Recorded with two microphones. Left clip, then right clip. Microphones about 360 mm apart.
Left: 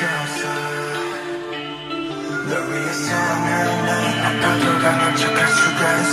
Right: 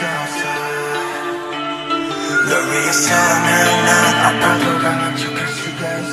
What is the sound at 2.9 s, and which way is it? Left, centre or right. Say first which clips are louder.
Music: right 8 dB; right.